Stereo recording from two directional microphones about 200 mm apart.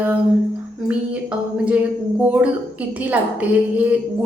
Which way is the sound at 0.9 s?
5° right (ahead or behind).